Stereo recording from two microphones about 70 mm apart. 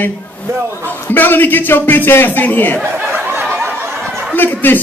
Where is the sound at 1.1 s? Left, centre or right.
Left.